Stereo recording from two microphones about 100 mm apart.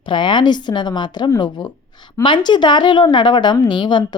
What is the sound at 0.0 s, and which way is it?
A woman's voice, 50° left (ahead or behind).